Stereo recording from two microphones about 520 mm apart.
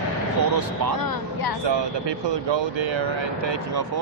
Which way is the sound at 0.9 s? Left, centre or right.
Left.